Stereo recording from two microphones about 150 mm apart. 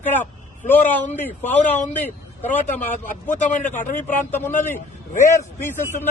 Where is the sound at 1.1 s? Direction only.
15° left (ahead or behind).